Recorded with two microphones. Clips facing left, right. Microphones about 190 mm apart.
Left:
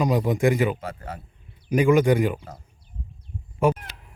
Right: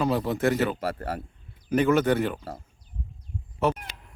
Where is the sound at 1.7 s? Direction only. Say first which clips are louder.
Left 3 dB; 10° left (ahead or behind).